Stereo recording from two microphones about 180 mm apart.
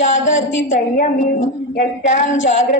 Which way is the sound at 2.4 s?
90° left.